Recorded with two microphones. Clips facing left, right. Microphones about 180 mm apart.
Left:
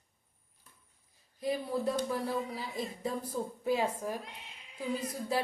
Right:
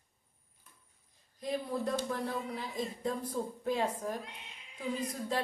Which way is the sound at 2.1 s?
5° left (ahead or behind).